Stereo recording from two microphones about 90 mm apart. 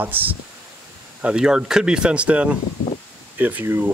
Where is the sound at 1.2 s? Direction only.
10° right (ahead or behind).